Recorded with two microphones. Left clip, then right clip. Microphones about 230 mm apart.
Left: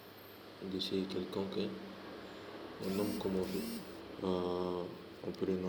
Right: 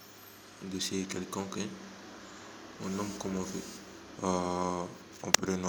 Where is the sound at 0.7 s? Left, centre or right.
Right.